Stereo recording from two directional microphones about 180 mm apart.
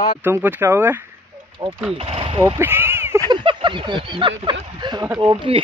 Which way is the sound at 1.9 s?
30° right (ahead or behind).